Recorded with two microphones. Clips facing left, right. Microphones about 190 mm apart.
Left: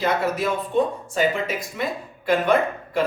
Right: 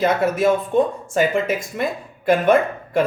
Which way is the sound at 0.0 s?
50° right (ahead or behind).